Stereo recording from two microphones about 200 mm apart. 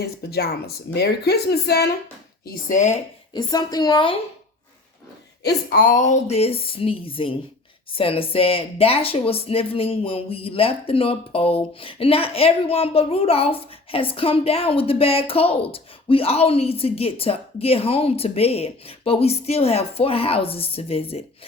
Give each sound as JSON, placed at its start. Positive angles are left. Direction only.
{"t": 0.0, "sound": "speech", "side_deg": 50}
{"t": 2.5, "sound": "speech", "side_deg": 40}
{"t": 3.3, "sound": "speech", "side_deg": 20}
{"t": 5.4, "sound": "speech", "side_deg": 50}